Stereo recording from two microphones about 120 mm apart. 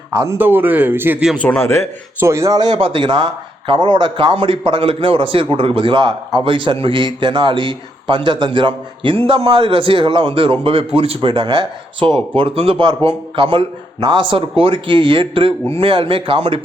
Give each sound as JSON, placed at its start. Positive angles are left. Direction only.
{"t": 0.1, "sound": "speech", "side_deg": -25}
{"t": 1.4, "sound": "a man's voice", "side_deg": 10}
{"t": 1.6, "sound": "speech", "side_deg": 20}
{"t": 2.2, "sound": "a man's voice", "side_deg": -25}